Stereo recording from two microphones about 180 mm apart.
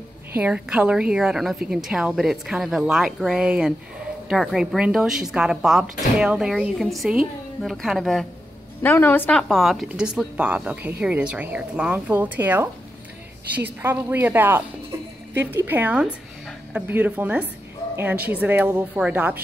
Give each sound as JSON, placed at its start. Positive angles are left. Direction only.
{"t": 0.4, "sound": "speech", "side_deg": -5}